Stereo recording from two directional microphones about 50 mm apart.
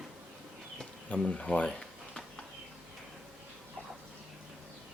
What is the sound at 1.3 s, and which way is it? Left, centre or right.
Speech, left.